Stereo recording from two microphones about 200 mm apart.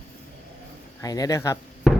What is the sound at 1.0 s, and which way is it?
Speech, 20° left (ahead or behind).